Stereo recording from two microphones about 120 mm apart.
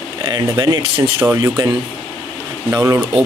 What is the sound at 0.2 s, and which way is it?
Speech, 35° right (ahead or behind).